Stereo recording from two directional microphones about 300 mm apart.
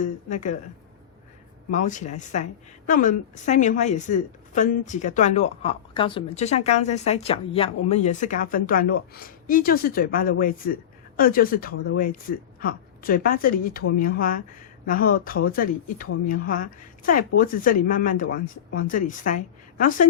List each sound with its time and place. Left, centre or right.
0.0 s a woman's voice: left
1.7 s a woman's voice: left